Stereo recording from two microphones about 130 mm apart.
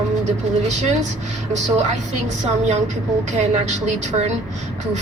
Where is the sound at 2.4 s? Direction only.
60° right (ahead or behind).